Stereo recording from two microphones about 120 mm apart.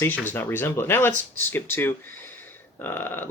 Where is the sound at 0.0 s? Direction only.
15° left (ahead or behind).